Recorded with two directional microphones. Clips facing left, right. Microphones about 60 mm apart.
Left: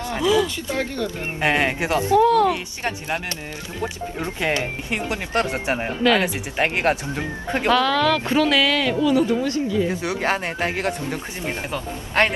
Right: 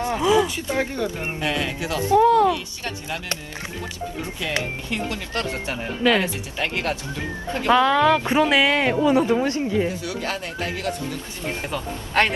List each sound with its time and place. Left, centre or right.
0.0 s speech: right
1.4 s speech: left
2.1 s speech: centre
2.5 s speech: left
4.9 s speech: left
7.7 s speech: right
9.9 s speech: left